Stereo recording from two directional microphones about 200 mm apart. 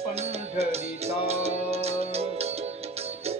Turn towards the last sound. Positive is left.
turn(degrees=-30)  # may be behind; listen again after turning